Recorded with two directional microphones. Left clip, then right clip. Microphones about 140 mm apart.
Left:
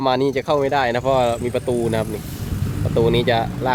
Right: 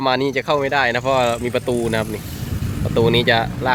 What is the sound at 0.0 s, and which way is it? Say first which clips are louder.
Speech: even; 25° left (ahead or behind).